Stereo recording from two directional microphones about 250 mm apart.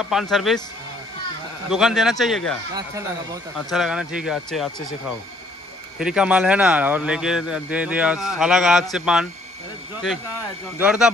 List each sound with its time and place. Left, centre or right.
0.1 s speech: centre
1.7 s speech: centre
3.5 s speech: centre
10.8 s speech: centre